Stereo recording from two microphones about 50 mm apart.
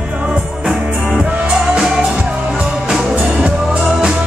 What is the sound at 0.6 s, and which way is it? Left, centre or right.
Music, centre.